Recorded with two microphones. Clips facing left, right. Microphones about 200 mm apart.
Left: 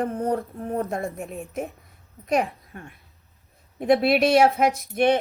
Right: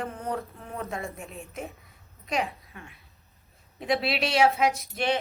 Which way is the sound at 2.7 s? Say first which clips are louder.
Left 5 dB; 50° left (ahead or behind).